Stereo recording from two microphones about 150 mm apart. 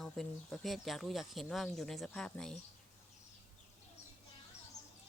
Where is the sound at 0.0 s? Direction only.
5° left (ahead or behind).